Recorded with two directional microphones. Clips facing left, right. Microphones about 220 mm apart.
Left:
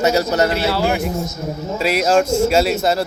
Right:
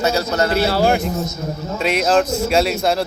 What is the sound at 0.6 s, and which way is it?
Speech, 45° right (ahead or behind).